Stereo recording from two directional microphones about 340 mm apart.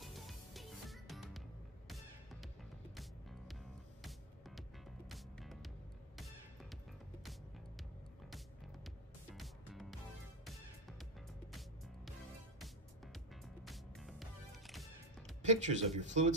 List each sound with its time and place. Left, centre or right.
0.0 s music: centre
2.4 s music: centre
8.8 s music: centre
12.5 s music: centre
15.4 s speech: right